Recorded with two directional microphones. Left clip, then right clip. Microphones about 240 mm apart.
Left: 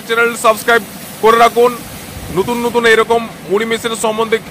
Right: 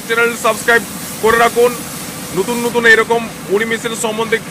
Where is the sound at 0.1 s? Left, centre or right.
Centre.